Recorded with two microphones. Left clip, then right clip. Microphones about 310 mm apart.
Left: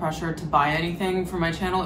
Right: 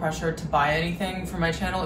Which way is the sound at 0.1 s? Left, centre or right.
Centre.